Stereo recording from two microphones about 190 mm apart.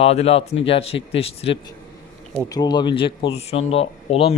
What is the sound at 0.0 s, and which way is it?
Speech, 35° left (ahead or behind).